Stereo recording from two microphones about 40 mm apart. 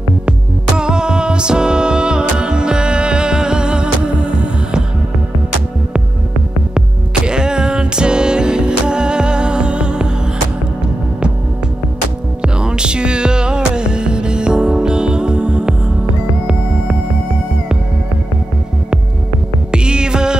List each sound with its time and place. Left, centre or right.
0.7 s music: right
7.2 s music: right
12.4 s music: right
19.7 s music: right